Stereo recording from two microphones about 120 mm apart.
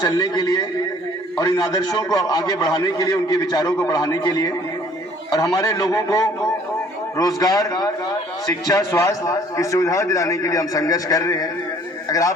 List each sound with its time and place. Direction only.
0.0 s a man's voice: 30° left (ahead or behind)